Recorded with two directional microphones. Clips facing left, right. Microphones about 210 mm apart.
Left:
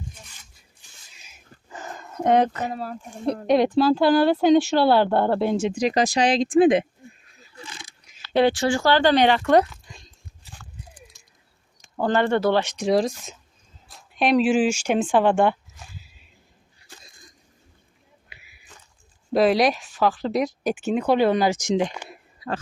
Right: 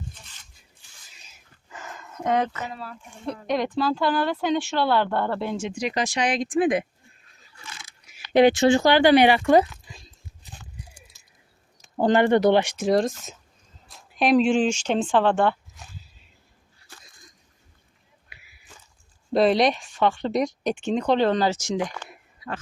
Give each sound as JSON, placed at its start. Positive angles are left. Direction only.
{"t": 1.7, "sound": "speech", "side_deg": 35}
{"t": 8.0, "sound": "speech", "side_deg": -15}
{"t": 10.4, "sound": "horse", "side_deg": -15}
{"t": 11.9, "sound": "speech", "side_deg": -15}
{"t": 12.7, "sound": "speech", "side_deg": 0}
{"t": 19.3, "sound": "speech", "side_deg": 0}
{"t": 22.4, "sound": "speech", "side_deg": 35}